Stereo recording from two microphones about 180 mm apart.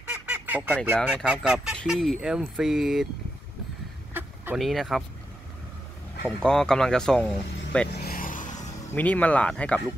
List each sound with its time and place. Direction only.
0.1 s goose: 10° right (ahead or behind)
1.0 s speech: 5° right (ahead or behind)
4.1 s fowl: 10° right (ahead or behind)
4.6 s speech: centre (ahead or behind)
6.2 s speech: 5° left (ahead or behind)
7.9 s vehicle: 60° left (ahead or behind)
8.9 s speech: 10° left (ahead or behind)